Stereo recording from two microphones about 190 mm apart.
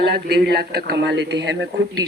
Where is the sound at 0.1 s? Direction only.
60° right (ahead or behind).